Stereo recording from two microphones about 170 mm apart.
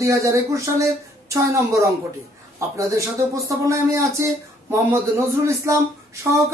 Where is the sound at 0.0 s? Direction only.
15° right (ahead or behind).